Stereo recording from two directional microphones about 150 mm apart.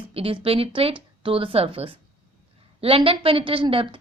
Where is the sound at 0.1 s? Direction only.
40° right (ahead or behind).